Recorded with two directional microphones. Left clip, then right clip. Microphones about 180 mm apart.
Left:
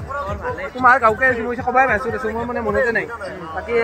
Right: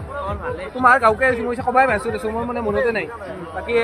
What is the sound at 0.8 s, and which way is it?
Speech, 5° left (ahead or behind).